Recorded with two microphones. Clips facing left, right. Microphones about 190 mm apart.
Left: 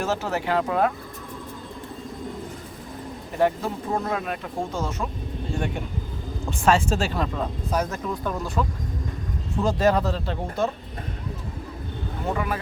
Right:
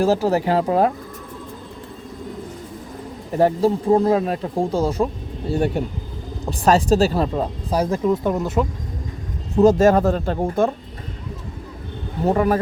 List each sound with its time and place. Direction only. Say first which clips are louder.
0.0 s speech: right 8 dB; 35° right (ahead or behind)
3.3 s speech: right 6 dB; 35° right (ahead or behind)
9.6 s speech: right 8 dB; 45° right (ahead or behind)
12.2 s speech: right 10 dB; 40° right (ahead or behind)